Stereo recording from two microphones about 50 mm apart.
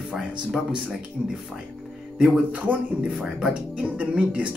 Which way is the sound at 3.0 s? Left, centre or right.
Centre.